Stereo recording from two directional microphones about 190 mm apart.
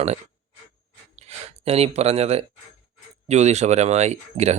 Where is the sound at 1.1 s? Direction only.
35° right (ahead or behind).